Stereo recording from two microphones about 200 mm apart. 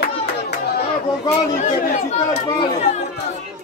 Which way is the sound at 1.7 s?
35° left (ahead or behind).